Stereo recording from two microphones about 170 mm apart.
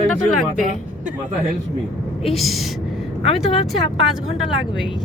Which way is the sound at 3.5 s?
35° left (ahead or behind).